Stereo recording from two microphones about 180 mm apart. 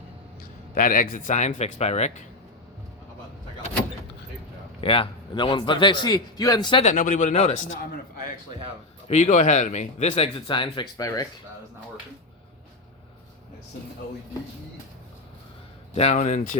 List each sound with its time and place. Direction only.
0.7 s speech: 50° left (ahead or behind)
4.8 s a man's voice: 30° left (ahead or behind)
6.8 s speech: 45° left (ahead or behind)
9.0 s speech: 40° left (ahead or behind); by 11.3 s 20° left (ahead or behind)
16.0 s speech: 40° left (ahead or behind)